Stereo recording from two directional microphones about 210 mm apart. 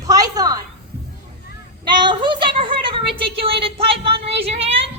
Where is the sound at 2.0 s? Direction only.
20° right (ahead or behind).